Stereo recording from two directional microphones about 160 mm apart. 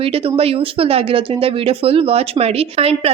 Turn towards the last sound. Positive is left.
turn(degrees=-40)  # may be behind; listen again after turning